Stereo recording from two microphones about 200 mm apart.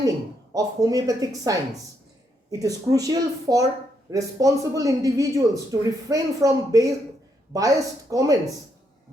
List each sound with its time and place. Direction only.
0.5 s speech: 20° right (ahead or behind)